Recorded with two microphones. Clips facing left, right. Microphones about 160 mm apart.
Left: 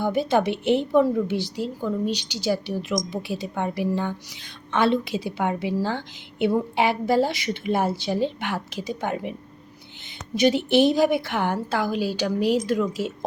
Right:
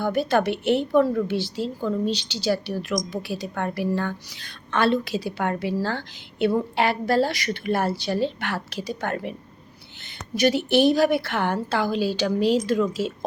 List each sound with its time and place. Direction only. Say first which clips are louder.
0.0 s a woman's voice: even; 20° left (ahead or behind)
10.3 s a woman's voice: left 1 dB; 20° left (ahead or behind)